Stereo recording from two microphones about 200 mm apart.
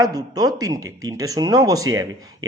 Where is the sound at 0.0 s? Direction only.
20° right (ahead or behind).